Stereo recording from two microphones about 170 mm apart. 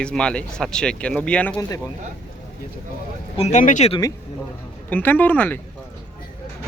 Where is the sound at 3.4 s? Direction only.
45° left (ahead or behind).